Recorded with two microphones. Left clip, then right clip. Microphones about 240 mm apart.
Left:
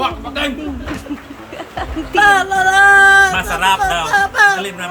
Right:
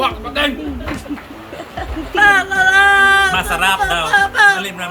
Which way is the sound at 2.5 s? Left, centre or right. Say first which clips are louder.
Left 1 dB; left.